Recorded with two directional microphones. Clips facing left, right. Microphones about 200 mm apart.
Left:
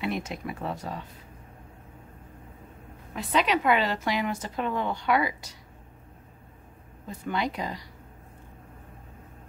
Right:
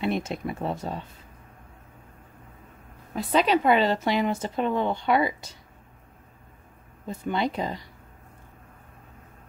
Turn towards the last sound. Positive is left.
turn(degrees=-25)  # may be behind; listen again after turning